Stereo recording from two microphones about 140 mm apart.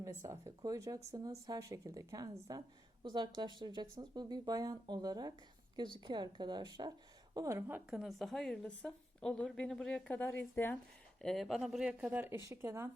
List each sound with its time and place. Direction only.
0.0 s speech: 20° right (ahead or behind)
7.9 s a woman's voice: centre (ahead or behind); by 10.8 s 15° left (ahead or behind)
11.2 s speech: 5° left (ahead or behind); by 12.9 s 15° right (ahead or behind)